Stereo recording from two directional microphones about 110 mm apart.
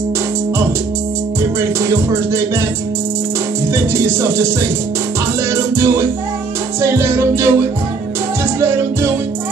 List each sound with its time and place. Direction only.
1.9 s music: 25° right (ahead or behind)
3.9 s music: 25° right (ahead or behind)
5.5 s music: 25° right (ahead or behind)
8.5 s music: 25° right (ahead or behind)